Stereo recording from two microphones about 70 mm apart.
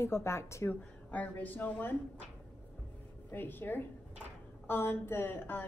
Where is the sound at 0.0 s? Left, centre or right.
Left.